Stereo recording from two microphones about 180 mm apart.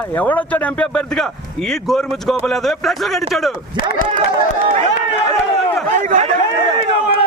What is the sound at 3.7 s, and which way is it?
Speech, 25° right (ahead or behind).